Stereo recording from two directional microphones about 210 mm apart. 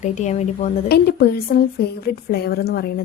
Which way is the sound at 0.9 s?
50° left (ahead or behind).